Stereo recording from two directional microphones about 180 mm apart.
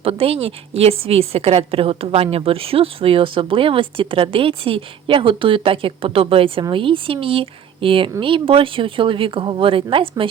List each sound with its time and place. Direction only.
0.0 s a woman's voice: 35° right (ahead or behind)